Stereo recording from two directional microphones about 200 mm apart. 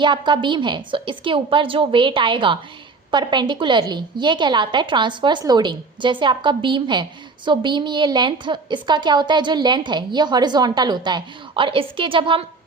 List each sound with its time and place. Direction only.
0.0 s a woman's voice: 25° right (ahead or behind)